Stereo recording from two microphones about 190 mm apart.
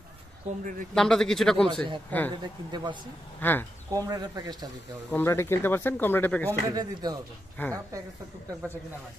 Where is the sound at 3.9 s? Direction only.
20° right (ahead or behind).